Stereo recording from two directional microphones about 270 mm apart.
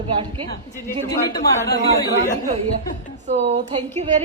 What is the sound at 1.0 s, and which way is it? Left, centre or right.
Speech, centre.